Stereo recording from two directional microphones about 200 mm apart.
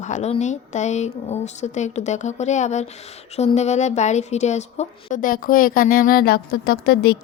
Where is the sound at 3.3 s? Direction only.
35° left (ahead or behind).